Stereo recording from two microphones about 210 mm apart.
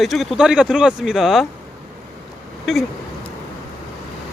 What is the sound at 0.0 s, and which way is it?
Speech, centre (ahead or behind).